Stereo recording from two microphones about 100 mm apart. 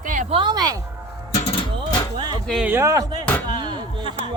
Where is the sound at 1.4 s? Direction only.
65° left (ahead or behind).